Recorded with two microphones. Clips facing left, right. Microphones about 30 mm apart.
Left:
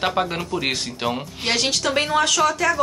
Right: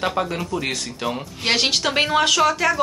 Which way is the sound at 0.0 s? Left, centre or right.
Centre.